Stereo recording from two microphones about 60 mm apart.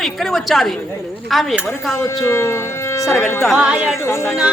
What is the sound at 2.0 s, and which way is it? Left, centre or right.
Speech, left.